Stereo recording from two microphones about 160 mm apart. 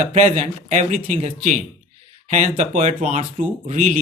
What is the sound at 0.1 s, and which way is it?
Speech, 40° right (ahead or behind).